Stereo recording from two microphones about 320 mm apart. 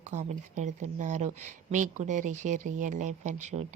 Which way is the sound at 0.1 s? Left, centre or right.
Right.